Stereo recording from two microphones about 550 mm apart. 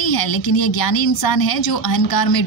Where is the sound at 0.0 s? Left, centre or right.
Left.